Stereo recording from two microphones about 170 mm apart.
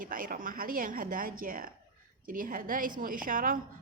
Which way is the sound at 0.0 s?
55° right (ahead or behind).